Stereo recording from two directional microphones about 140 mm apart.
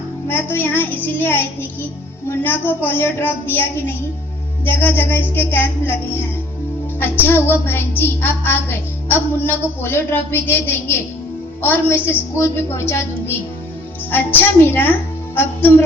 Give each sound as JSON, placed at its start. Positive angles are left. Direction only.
{"t": 0.3, "sound": "a woman's voice", "side_deg": 15}